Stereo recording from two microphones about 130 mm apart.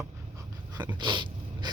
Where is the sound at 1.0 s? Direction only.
35° right (ahead or behind).